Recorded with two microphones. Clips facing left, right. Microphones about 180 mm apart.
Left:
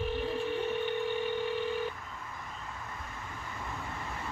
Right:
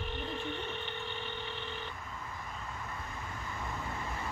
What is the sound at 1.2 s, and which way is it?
Telephone, 10° left (ahead or behind).